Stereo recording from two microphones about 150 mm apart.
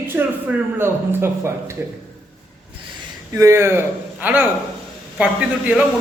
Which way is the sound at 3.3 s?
20° right (ahead or behind).